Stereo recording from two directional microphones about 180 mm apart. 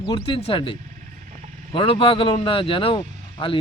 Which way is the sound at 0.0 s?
30° left (ahead or behind).